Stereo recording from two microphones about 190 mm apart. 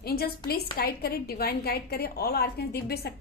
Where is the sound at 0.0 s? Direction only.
55° left (ahead or behind).